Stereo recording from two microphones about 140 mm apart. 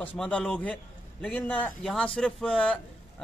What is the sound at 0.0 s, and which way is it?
Speech, 10° left (ahead or behind).